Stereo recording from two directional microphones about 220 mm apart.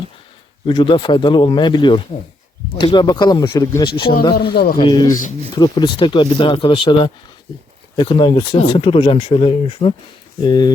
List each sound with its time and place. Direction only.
0.6 s speech: 20° left (ahead or behind)
4.5 s a man's voice: 40° left (ahead or behind)
4.8 s speech: 20° left (ahead or behind)